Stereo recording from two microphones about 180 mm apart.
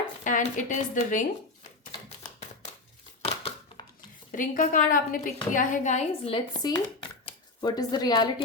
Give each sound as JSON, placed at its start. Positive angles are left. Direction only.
{"t": 0.3, "sound": "a woman's voice", "side_deg": 45}
{"t": 3.2, "sound": "a sound", "side_deg": 35}
{"t": 4.3, "sound": "a woman's voice", "side_deg": 45}